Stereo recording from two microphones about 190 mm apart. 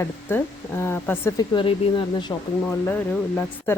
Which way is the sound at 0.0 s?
10° left (ahead or behind).